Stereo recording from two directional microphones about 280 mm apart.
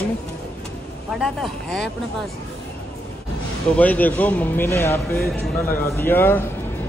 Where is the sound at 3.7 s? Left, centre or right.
Centre.